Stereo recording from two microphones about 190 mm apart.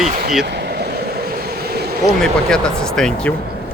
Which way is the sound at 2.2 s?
5° left (ahead or behind).